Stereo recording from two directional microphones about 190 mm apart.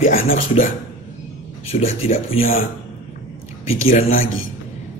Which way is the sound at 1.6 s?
35° left (ahead or behind).